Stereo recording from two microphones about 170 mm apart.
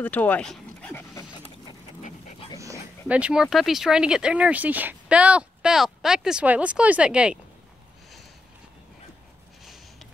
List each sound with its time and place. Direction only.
0.0 s speech: 10° left (ahead or behind)
1.1 s dog: 25° left (ahead or behind)
2.0 s dog: 45° left (ahead or behind)
3.1 s speech: 5° right (ahead or behind)